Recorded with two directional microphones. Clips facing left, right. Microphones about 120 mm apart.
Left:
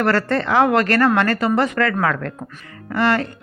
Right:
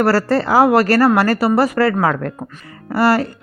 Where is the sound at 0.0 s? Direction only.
35° right (ahead or behind).